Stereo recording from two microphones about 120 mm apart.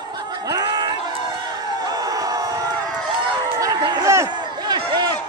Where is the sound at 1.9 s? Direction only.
30° right (ahead or behind).